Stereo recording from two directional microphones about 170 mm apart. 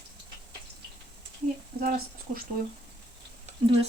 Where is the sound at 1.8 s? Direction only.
55° right (ahead or behind).